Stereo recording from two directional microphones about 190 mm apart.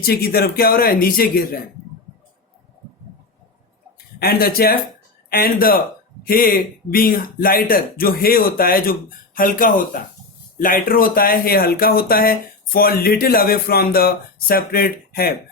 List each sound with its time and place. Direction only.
0.0 s speech: 55° left (ahead or behind)
4.2 s speech: 50° left (ahead or behind)